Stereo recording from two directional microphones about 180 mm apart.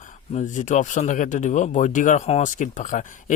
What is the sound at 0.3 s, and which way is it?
Speech, 45° left (ahead or behind).